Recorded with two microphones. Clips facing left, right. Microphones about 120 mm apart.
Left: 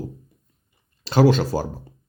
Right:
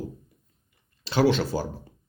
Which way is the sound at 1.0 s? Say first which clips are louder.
Left 5 dB; 45° left (ahead or behind).